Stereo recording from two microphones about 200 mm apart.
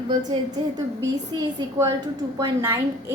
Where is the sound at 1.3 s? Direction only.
25° right (ahead or behind).